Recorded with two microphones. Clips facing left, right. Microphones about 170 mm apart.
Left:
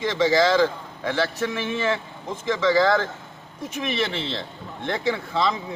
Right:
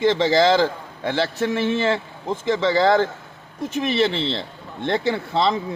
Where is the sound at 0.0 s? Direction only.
30° right (ahead or behind).